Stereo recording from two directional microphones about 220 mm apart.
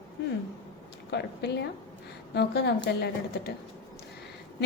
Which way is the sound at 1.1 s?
50° left (ahead or behind).